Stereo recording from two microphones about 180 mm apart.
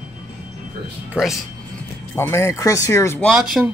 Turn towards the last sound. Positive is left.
turn(degrees=-5)  # may be behind; listen again after turning